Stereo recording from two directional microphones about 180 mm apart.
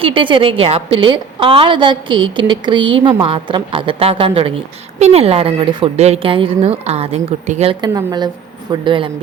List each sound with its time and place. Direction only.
0.0 s a woman's voice: 30° right (ahead or behind)